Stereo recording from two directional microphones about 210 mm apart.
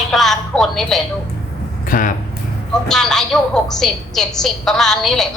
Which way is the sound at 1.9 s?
40° left (ahead or behind).